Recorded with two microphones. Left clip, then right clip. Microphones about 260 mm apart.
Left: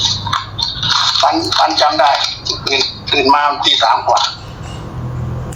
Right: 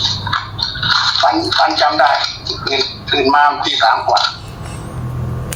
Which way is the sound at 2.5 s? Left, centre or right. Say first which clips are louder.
Left 2 dB; centre.